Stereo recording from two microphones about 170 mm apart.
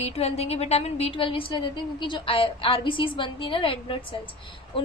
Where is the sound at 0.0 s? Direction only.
35° left (ahead or behind).